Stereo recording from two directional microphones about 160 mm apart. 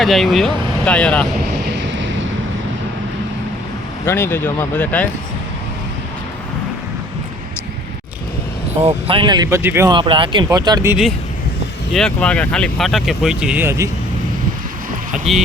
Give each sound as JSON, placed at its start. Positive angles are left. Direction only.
{"t": 0.0, "sound": "speech", "side_deg": 0}
{"t": 4.0, "sound": "speech", "side_deg": 15}
{"t": 8.8, "sound": "speech", "side_deg": -40}
{"t": 9.9, "sound": "speech", "side_deg": -30}
{"t": 11.9, "sound": "speech", "side_deg": 5}